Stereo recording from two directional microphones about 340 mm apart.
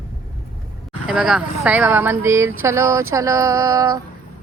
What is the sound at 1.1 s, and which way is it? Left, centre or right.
Speech, centre.